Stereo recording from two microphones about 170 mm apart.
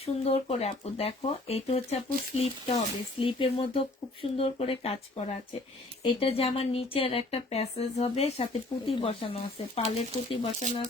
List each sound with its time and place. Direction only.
0.0 s speech: 35° left (ahead or behind)